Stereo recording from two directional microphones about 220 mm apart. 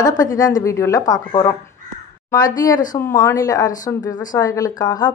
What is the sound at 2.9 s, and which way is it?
A woman's voice, 15° left (ahead or behind).